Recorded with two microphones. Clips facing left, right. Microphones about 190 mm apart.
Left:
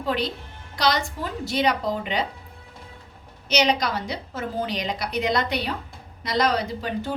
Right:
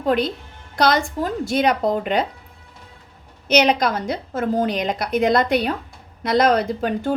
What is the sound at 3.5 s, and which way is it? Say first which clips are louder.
A woman's voice: right 5 dB; 55° right (ahead or behind).